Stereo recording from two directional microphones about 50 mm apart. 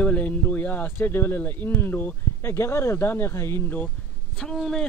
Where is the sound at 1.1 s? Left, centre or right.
Left.